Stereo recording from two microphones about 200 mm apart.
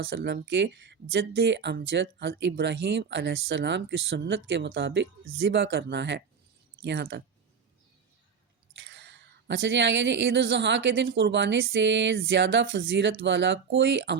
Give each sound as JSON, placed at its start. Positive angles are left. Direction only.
{"t": 0.0, "sound": "speech", "side_deg": -65}
{"t": 8.9, "sound": "speech", "side_deg": -65}